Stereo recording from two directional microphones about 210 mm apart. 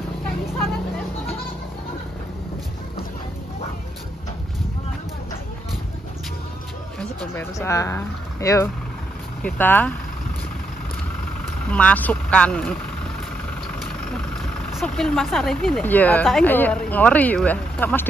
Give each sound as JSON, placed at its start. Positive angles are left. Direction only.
{"t": 7.0, "sound": "speech", "side_deg": 10}
{"t": 11.7, "sound": "speech", "side_deg": 5}
{"t": 14.7, "sound": "speech", "side_deg": 0}